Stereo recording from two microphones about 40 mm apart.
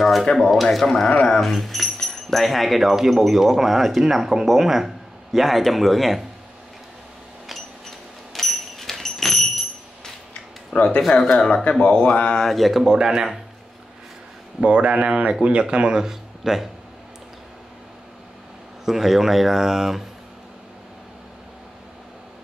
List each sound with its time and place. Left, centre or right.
0.0 s speech: centre
1.0 s speech: left
1.4 s speech: centre
8.3 s a sound: centre
10.7 s speech: centre
11.1 s speech: centre
11.4 s speech: left
12.4 s speech: centre
12.8 s speech: centre
14.6 s speech: right
16.0 s speech: centre
18.9 s speech: centre